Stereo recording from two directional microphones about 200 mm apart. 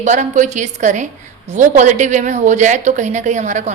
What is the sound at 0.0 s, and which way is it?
A woman's voice, 35° right (ahead or behind).